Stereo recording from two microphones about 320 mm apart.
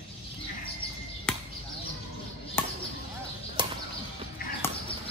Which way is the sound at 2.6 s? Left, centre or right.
Centre.